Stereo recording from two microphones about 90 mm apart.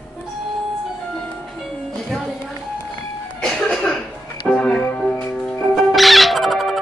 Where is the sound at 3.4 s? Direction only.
5° left (ahead or behind).